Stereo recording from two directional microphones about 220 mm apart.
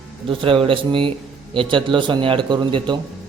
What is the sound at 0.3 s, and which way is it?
Speech, 25° right (ahead or behind).